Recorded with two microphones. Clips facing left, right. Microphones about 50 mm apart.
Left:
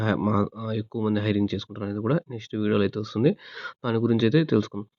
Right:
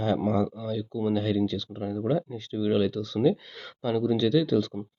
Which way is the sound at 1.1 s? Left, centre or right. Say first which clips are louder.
Left 1 dB; left.